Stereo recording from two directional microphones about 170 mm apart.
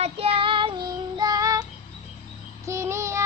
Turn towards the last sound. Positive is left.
turn(degrees=-15)  # may be behind; listen again after turning